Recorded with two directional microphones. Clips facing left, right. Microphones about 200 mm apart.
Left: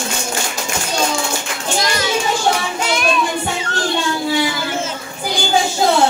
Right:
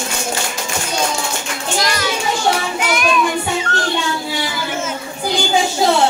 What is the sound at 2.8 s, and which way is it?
Child singing, 30° left (ahead or behind).